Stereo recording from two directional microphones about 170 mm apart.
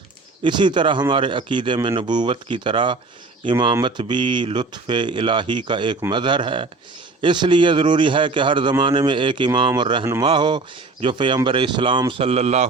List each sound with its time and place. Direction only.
0.4 s a man's voice: 25° right (ahead or behind)